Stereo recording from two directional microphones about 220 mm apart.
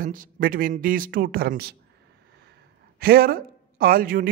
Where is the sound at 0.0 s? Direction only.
40° right (ahead or behind).